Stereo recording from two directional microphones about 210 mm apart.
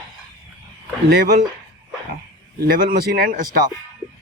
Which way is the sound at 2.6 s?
45° right (ahead or behind).